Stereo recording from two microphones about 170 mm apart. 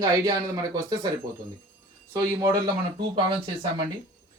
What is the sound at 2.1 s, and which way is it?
Speech, 20° right (ahead or behind).